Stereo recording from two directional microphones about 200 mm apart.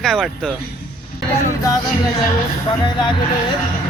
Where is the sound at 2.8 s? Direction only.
20° left (ahead or behind).